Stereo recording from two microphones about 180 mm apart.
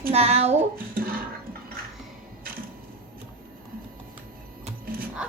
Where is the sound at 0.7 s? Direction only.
55° right (ahead or behind).